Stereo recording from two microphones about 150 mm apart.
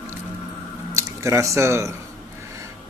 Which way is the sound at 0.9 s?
20° right (ahead or behind).